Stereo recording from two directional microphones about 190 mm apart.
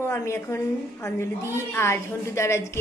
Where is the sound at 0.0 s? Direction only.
15° left (ahead or behind).